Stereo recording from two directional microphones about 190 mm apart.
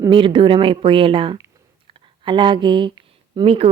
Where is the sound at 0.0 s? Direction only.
25° right (ahead or behind).